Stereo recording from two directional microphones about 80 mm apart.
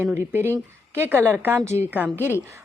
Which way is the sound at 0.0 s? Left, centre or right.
Right.